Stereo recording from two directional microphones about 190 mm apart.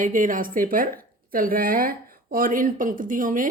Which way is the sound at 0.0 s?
45° right (ahead or behind).